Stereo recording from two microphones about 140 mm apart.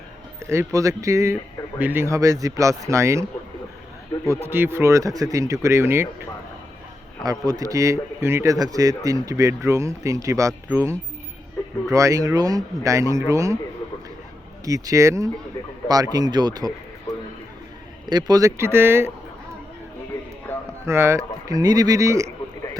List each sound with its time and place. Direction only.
0.4 s speech: 20° right (ahead or behind)
4.3 s speech: 15° right (ahead or behind)
14.6 s speech: 25° right (ahead or behind)
18.1 s speech: 30° right (ahead or behind)
20.8 s speech: 20° right (ahead or behind)